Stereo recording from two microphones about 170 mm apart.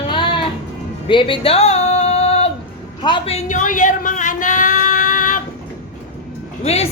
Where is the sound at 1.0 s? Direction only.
30° left (ahead or behind).